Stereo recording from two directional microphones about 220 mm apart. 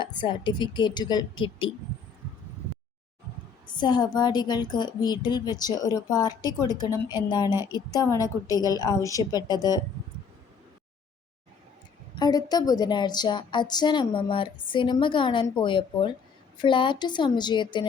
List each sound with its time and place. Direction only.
0.0 s speech: 20° left (ahead or behind)
3.7 s a woman's voice: 20° left (ahead or behind)
12.2 s speech: 15° left (ahead or behind)